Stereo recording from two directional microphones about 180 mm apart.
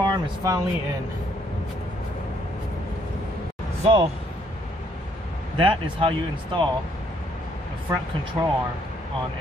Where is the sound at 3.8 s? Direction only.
35° right (ahead or behind).